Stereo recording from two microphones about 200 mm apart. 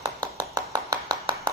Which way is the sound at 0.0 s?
20° right (ahead or behind).